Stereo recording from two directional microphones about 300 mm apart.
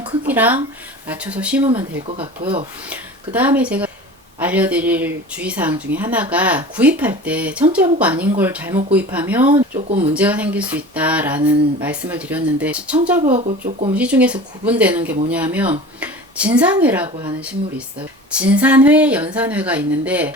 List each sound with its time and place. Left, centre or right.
0.3 s speech: centre
2.0 s speech: centre
2.9 s speech: centre
9.5 s speech: centre
10.2 s speech: centre
13.2 s speech: right
13.9 s speech: centre
18.3 s speech: centre